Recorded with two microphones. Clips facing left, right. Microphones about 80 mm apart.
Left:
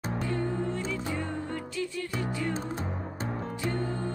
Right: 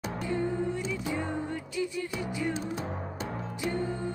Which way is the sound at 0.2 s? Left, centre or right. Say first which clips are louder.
Right 1 dB; centre.